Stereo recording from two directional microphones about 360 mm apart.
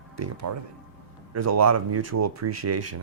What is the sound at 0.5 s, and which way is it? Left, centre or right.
Speech, right.